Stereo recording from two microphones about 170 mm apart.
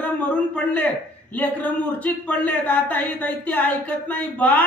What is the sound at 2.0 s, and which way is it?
Speech, 10° left (ahead or behind).